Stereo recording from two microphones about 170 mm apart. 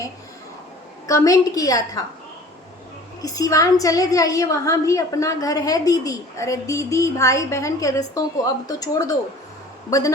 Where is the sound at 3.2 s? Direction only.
20° left (ahead or behind).